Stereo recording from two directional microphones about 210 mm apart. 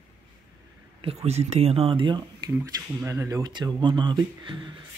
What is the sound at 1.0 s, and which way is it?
Speech, 30° right (ahead or behind).